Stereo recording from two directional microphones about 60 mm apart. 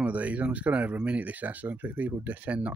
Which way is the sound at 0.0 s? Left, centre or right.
Right.